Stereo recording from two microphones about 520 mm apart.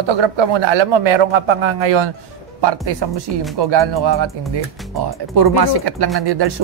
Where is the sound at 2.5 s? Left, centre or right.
Right.